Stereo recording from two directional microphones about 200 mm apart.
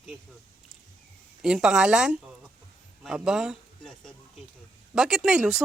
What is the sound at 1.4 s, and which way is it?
A woman's voice, 5° right (ahead or behind).